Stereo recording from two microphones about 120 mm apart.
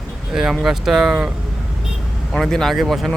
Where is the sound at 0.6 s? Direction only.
5° right (ahead or behind).